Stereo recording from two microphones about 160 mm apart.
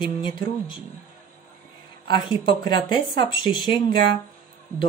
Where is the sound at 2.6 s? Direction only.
30° left (ahead or behind).